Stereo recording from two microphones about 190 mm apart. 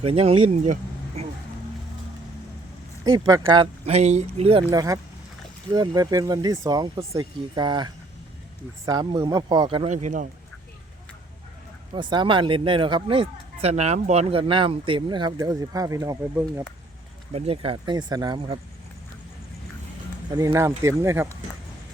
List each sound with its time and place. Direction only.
0.0 s speech: 30° right (ahead or behind)
3.0 s speech: 20° right (ahead or behind)
3.8 s speech: 35° right (ahead or behind)
4.7 s speech: 20° right (ahead or behind)
8.9 s speech: 20° right (ahead or behind); by 10.2 s 40° right (ahead or behind)
11.9 s speech: 25° right (ahead or behind)
17.3 s speech: 30° right (ahead or behind)
20.3 s speech: 15° right (ahead or behind)